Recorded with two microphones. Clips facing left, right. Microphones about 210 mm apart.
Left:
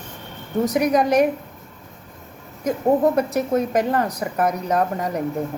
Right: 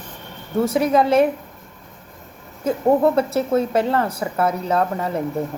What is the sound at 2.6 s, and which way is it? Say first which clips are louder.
A woman's voice: right 1 dB; 15° left (ahead or behind).